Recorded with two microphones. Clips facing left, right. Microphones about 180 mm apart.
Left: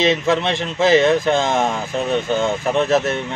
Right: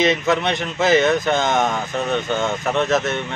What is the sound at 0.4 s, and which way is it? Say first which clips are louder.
Speech: left 1 dB; centre (ahead or behind).